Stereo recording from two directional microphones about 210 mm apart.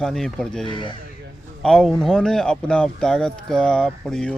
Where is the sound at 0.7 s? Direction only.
25° left (ahead or behind).